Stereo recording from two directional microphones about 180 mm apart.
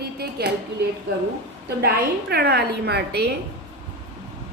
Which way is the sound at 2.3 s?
60° right (ahead or behind).